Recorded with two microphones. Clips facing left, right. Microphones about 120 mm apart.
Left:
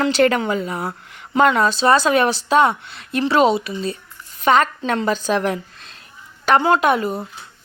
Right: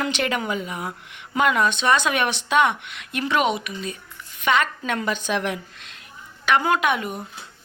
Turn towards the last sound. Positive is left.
turn(degrees=35)  # may be behind; listen again after turning